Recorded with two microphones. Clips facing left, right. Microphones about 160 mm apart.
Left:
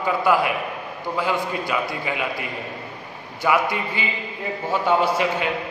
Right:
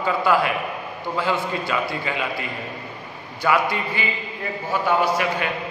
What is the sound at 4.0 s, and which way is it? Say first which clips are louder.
A man's voice: even; 20° left (ahead or behind).